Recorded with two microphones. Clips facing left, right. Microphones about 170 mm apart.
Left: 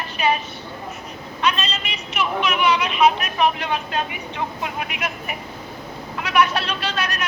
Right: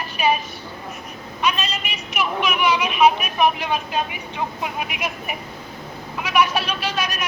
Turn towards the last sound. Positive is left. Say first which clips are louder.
# even
turn(degrees=-10)  # may be behind; listen again after turning